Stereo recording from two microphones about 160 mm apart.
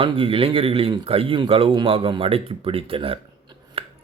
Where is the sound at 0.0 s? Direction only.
35° right (ahead or behind).